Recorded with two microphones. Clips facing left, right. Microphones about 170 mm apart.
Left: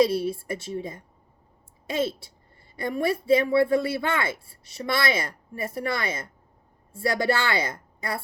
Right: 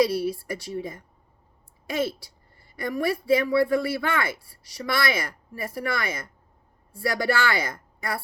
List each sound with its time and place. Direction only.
0.0 s a woman's voice: 25° left (ahead or behind)